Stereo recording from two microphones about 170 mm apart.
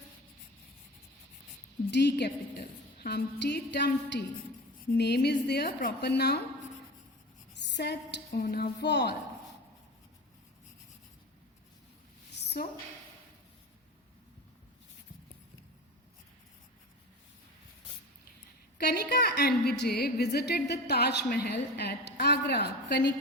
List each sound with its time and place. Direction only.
1.9 s a woman's voice: 90° left
2.6 s a woman's voice: 65° left (ahead or behind); by 4.2 s 85° left
4.9 s a woman's voice: 75° left (ahead or behind)
7.5 s a sound: 90° left
8.3 s a woman's voice: 60° left (ahead or behind); by 9.1 s 80° left
12.3 s a sound: 85° left
18.8 s a woman's voice: 75° left (ahead or behind); by 23.1 s 90° left